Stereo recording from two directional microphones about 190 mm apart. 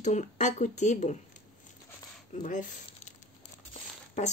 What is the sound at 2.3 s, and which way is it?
Speech, 40° left (ahead or behind).